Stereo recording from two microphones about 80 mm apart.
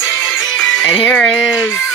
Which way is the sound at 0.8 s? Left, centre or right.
Centre.